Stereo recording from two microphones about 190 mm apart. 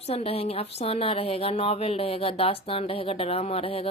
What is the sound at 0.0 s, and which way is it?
A woman's voice, 30° left (ahead or behind).